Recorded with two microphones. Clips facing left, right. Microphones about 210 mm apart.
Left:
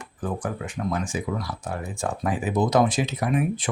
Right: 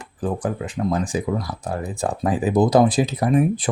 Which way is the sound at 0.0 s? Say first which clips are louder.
Right 5 dB; 30° right (ahead or behind).